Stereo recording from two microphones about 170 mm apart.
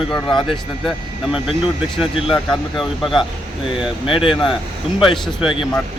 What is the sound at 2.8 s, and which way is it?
Speech, centre (ahead or behind).